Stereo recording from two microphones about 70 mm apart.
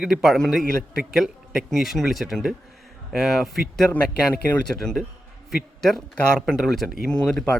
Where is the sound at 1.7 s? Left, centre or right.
Centre.